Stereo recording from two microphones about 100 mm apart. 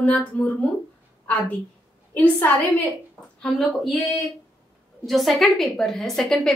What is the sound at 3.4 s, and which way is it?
Speech, 5° left (ahead or behind).